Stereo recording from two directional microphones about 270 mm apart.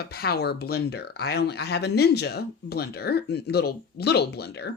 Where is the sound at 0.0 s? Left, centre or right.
Left.